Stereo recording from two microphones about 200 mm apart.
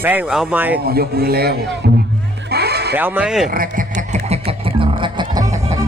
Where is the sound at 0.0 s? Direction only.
10° right (ahead or behind).